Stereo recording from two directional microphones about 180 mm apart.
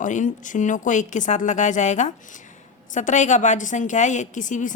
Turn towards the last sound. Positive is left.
turn(degrees=45)  # may be behind; listen again after turning